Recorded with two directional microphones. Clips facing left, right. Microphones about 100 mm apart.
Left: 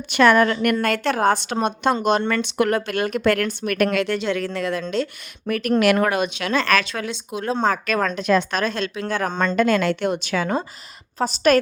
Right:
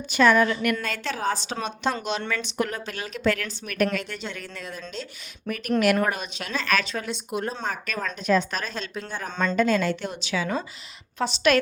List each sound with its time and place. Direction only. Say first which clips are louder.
0.1 s speech: left 4 dB; 65° left (ahead or behind)
3.9 s speech: left 10 dB; 85° left
5.8 s speech: left 4 dB; 85° left
9.6 s speech: left 4 dB; 75° left (ahead or behind); by 10.5 s 55° left (ahead or behind)
11.2 s a woman's voice: left 4 dB; 40° left (ahead or behind)